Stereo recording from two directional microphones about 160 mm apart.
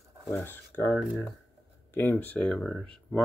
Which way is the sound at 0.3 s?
10° left (ahead or behind).